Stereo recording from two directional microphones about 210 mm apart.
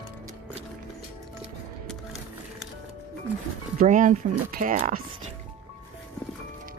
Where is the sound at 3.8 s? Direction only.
35° right (ahead or behind).